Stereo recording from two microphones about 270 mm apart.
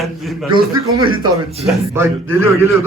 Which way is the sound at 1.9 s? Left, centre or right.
Centre.